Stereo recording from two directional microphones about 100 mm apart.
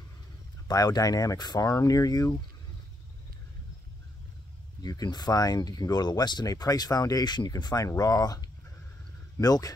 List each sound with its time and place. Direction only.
0.7 s speech: 40° left (ahead or behind)
4.8 s speech: 40° left (ahead or behind)